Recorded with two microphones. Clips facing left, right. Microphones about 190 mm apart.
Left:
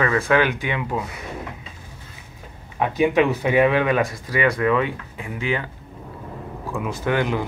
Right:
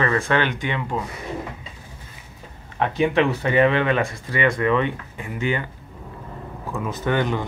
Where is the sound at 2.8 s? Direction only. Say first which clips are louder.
Left 1 dB; 10° left (ahead or behind).